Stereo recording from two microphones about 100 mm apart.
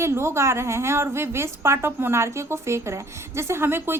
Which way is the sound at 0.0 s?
25° right (ahead or behind).